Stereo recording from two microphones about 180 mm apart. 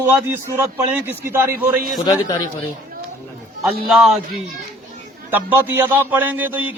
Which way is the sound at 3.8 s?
Centre (ahead or behind).